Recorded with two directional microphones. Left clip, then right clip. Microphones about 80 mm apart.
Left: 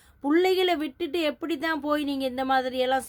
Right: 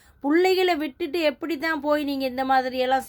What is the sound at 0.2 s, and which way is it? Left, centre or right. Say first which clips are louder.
A woman's voice: right 2 dB; left.